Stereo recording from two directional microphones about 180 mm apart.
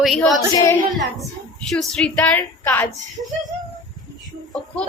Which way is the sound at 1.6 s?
5° left (ahead or behind).